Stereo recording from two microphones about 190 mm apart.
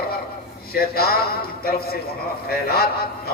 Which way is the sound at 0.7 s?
55° left (ahead or behind).